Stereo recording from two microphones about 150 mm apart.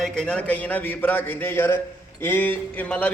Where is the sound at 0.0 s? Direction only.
5° left (ahead or behind).